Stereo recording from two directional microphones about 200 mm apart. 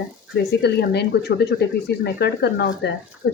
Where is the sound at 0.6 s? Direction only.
55° left (ahead or behind).